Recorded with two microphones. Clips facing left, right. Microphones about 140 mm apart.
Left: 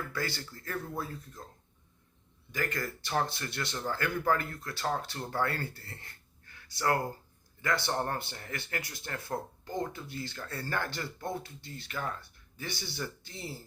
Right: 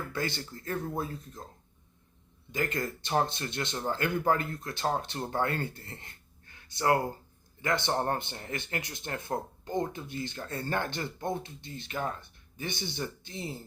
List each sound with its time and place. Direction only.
0.1 s speech: 20° right (ahead or behind)
2.5 s speech: 20° right (ahead or behind)